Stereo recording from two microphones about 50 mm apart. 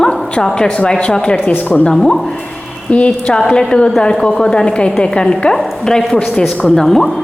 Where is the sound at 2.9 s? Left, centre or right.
Left.